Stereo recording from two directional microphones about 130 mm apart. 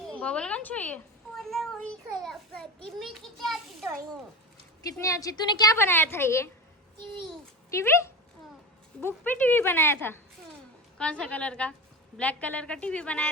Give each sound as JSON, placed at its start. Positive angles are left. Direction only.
{"t": 0.1, "sound": "a woman's voice", "side_deg": 10}
{"t": 1.4, "sound": "a sound", "side_deg": 0}
{"t": 2.2, "sound": "a child's voice", "side_deg": 5}
{"t": 5.0, "sound": "a woman's voice", "side_deg": 25}
{"t": 7.7, "sound": "a woman's voice", "side_deg": 20}